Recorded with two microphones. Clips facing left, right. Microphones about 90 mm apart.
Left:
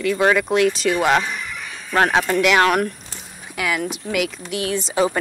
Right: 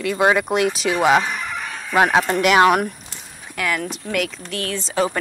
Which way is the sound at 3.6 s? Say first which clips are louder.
Left 1 dB; 5° left (ahead or behind).